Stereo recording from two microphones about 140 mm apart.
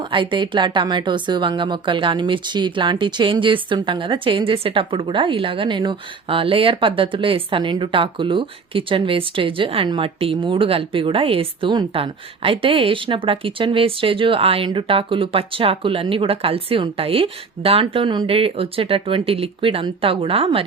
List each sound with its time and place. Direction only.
0.0 s speech: 35° right (ahead or behind)